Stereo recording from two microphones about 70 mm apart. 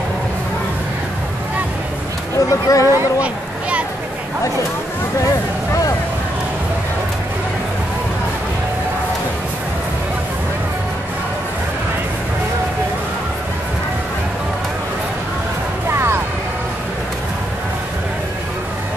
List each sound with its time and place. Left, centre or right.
2.3 s speech: left
15.9 s music: right